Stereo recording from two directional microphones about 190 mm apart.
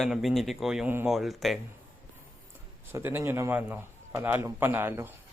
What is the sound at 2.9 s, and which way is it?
A man's voice, 10° right (ahead or behind).